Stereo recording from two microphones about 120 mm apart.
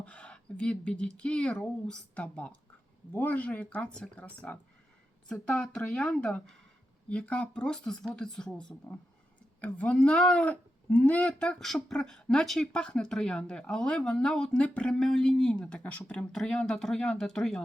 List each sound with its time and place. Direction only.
0.0 s speech: 10° left (ahead or behind)